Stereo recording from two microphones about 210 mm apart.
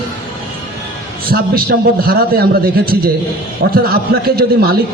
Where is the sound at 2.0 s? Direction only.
45° right (ahead or behind).